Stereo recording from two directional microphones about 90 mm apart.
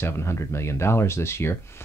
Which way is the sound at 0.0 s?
30° left (ahead or behind).